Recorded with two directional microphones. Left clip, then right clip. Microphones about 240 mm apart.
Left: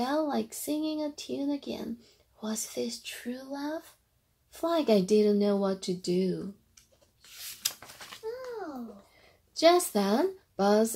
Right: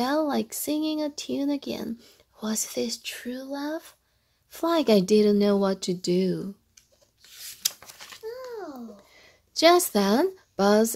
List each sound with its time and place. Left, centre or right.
0.0 s speech: right
9.1 s speech: right